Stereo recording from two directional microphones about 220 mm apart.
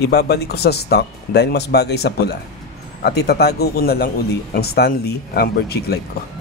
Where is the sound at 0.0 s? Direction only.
45° left (ahead or behind).